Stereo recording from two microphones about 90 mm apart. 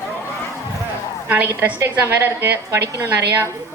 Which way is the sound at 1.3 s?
25° right (ahead or behind).